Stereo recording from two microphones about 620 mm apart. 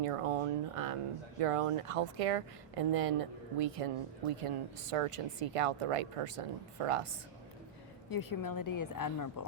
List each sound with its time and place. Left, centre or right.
0.0 s speech: right
8.1 s a woman's voice: left